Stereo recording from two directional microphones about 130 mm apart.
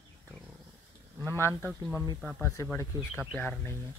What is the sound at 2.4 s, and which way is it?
Speech, 25° left (ahead or behind).